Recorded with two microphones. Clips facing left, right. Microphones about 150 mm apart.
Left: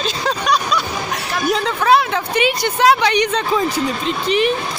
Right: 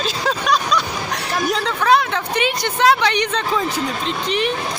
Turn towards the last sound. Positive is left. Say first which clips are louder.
# left 3 dB
turn(degrees=15)  # may be behind; listen again after turning